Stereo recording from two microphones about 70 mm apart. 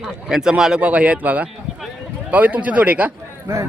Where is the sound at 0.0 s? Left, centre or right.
Centre; by 3.1 s right.